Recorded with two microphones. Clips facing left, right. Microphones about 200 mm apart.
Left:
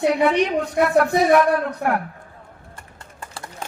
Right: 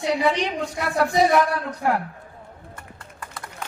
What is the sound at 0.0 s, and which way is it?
A woman's voice, 55° left (ahead or behind).